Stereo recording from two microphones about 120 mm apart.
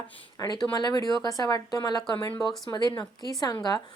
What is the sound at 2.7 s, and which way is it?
A woman's voice, 35° left (ahead or behind).